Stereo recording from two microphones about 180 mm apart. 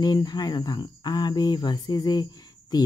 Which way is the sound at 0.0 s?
20° left (ahead or behind).